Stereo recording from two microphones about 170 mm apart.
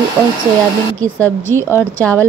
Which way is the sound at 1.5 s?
10° right (ahead or behind).